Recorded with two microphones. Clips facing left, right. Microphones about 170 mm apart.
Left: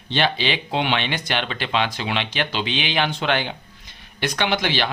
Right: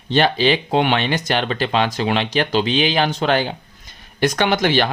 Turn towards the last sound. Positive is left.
turn(degrees=-45)  # may be behind; listen again after turning